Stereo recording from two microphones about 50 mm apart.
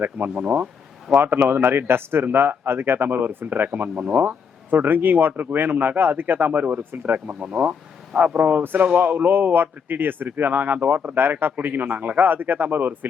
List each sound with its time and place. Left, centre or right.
0.0 s a man's voice: right
0.4 s speech: right
1.1 s a man's voice: right
7.3 s a man's voice: right
8.1 s a man's voice: centre
8.4 s a man's voice: right